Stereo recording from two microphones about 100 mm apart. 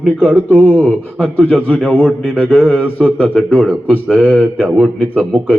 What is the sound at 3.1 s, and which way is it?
Speech, 15° left (ahead or behind).